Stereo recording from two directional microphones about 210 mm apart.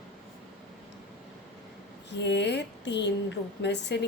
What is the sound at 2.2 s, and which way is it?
A woman's voice, 55° left (ahead or behind).